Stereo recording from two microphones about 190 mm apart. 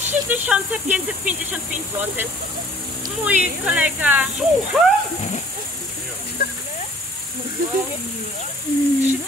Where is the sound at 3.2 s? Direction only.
10° right (ahead or behind).